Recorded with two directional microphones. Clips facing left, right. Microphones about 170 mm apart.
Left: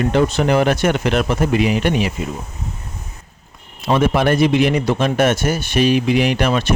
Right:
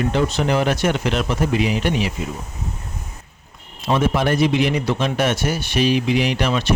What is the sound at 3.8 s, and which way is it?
A man's voice, 60° left (ahead or behind).